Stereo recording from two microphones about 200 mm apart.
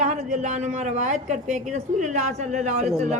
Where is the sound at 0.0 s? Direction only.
35° right (ahead or behind).